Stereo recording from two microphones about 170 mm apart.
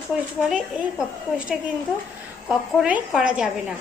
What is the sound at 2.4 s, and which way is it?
A woman's voice, 5° right (ahead or behind).